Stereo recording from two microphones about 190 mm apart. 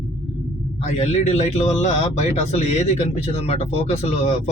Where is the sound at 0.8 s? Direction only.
35° left (ahead or behind).